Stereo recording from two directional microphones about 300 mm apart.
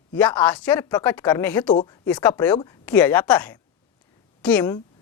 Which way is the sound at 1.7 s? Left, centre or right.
Centre.